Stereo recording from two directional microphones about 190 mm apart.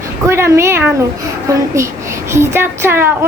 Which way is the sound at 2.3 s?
15° right (ahead or behind).